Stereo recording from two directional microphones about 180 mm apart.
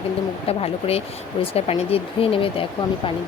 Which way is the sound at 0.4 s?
35° left (ahead or behind).